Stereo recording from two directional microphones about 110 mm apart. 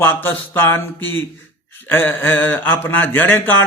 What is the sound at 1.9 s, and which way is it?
A man's voice, 20° left (ahead or behind).